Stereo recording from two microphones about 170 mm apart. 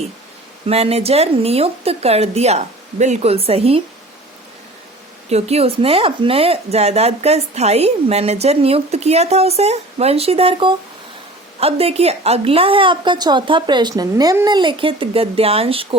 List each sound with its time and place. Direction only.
0.7 s speech: 35° right (ahead or behind)
5.3 s speech: 40° right (ahead or behind)